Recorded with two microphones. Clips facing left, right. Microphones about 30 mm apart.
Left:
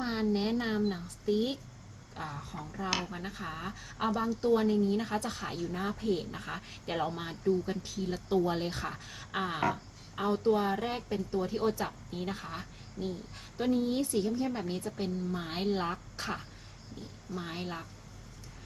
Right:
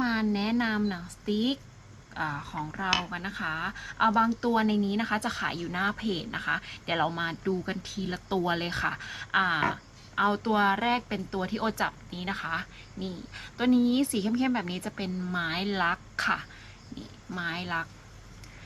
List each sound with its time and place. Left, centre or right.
0.0 s a sound: right
0.5 s speech: right
3.1 s speech: right
4.4 s speech: right
9.6 s speech: right
10.2 s speech: right